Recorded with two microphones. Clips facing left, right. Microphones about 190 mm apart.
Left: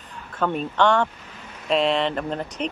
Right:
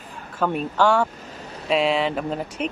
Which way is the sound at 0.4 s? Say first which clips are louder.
Even; 5° right (ahead or behind).